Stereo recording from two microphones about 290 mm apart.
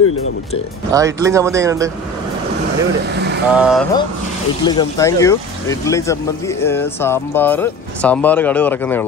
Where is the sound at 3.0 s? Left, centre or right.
Right.